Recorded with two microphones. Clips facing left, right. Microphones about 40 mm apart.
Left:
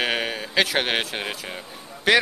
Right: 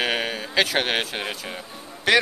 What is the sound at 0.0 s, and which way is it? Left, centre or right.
A man's voice, centre.